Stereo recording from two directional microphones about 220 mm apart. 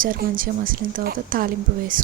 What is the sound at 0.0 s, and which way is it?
A woman's voice, 40° right (ahead or behind).